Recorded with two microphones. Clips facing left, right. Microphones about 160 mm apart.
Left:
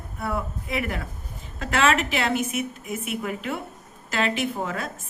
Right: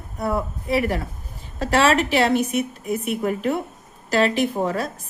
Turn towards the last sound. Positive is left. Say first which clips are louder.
# right 6 dB
turn(degrees=-35)  # may be behind; listen again after turning